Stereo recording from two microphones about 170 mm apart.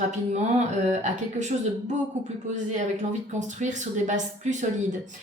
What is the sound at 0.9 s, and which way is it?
Speech, 45° right (ahead or behind).